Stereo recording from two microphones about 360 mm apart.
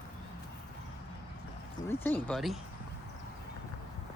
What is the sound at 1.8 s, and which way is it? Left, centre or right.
Speech, centre.